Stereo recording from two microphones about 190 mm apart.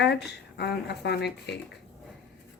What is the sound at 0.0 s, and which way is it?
Speech, 60° left (ahead or behind).